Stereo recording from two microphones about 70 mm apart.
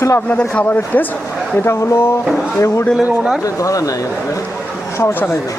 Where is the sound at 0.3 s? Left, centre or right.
Left.